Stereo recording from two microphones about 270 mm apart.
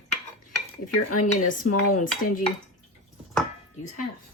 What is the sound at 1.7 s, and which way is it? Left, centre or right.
Speech, left.